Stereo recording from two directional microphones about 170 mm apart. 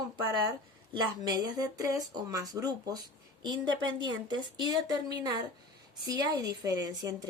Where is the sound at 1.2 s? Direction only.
25° right (ahead or behind).